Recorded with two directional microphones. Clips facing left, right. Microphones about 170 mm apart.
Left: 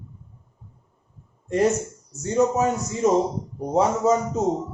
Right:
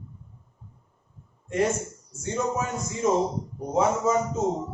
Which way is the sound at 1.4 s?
40° left (ahead or behind).